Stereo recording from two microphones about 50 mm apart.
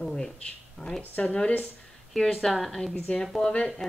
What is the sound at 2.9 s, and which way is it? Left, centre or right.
Speech, centre.